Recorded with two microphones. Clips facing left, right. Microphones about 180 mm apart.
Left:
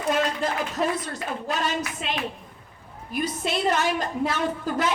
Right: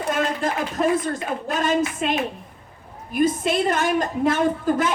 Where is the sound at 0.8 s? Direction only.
50° right (ahead or behind).